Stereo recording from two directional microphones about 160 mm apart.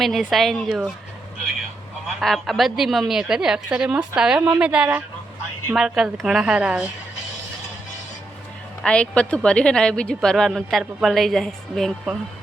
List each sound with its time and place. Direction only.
0.0 s a woman's voice: centre (ahead or behind)
2.2 s a woman's voice: centre (ahead or behind)
8.8 s a woman's voice: 5° left (ahead or behind)